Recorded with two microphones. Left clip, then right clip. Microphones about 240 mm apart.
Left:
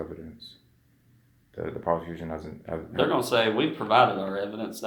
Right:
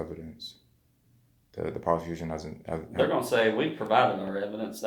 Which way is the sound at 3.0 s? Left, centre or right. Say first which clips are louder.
Left 1 dB; left.